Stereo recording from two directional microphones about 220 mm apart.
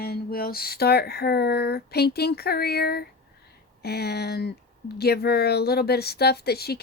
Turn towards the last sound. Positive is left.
turn(degrees=45)  # may be behind; listen again after turning